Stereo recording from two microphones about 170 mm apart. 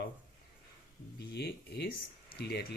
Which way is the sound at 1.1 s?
70° left (ahead or behind).